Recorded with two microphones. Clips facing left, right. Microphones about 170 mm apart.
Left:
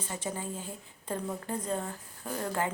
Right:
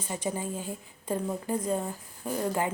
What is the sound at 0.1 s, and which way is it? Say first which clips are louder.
A woman's voice: right 5 dB; 15° right (ahead or behind).